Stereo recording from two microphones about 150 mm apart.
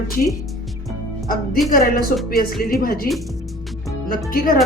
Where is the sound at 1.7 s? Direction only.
75° left (ahead or behind).